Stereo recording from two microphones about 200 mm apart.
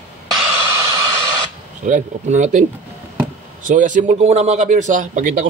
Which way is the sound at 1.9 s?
35° right (ahead or behind).